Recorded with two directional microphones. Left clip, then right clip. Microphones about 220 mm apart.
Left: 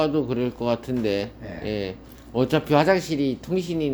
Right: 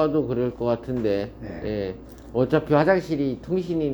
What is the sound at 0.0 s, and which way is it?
Speech, 30° left (ahead or behind).